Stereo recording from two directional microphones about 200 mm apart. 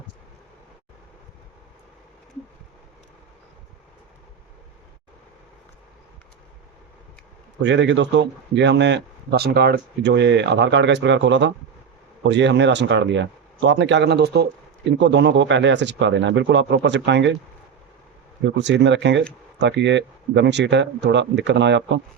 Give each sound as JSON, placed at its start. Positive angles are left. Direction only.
{"t": 7.6, "sound": "speech", "side_deg": -65}
{"t": 18.4, "sound": "speech", "side_deg": -60}